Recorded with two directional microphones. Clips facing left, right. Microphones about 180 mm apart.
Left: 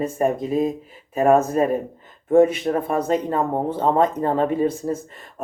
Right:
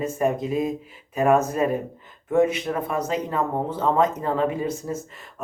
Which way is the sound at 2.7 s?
35° left (ahead or behind).